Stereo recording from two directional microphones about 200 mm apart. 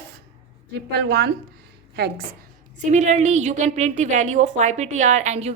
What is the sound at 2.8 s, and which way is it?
A woman's voice, 35° right (ahead or behind).